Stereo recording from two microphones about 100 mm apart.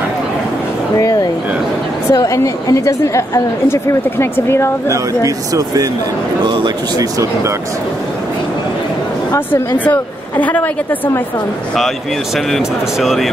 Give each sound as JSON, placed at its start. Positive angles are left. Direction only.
{"t": 0.9, "sound": "a sound", "side_deg": 35}
{"t": 2.1, "sound": "a woman's voice", "side_deg": 35}
{"t": 4.8, "sound": "speech", "side_deg": -35}
{"t": 6.4, "sound": "speech", "side_deg": -50}
{"t": 9.8, "sound": "a woman's voice", "side_deg": 15}
{"t": 12.4, "sound": "speech", "side_deg": 0}